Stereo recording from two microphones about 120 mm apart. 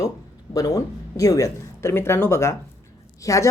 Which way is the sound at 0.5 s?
30° left (ahead or behind).